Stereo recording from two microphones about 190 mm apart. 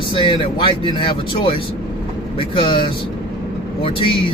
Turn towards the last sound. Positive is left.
turn(degrees=30)  # may be behind; listen again after turning